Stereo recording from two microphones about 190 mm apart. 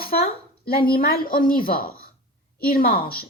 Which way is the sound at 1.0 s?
50° left (ahead or behind).